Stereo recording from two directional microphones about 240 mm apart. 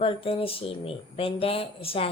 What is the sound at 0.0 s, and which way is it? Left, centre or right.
A woman's voice, left.